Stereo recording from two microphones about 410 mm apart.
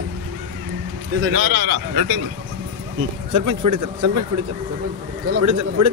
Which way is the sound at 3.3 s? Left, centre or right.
Right.